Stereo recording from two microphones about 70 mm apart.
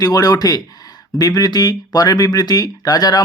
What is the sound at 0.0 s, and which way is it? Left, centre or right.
Speech, left.